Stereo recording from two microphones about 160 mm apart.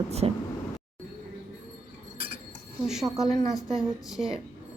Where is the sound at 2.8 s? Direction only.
Centre (ahead or behind).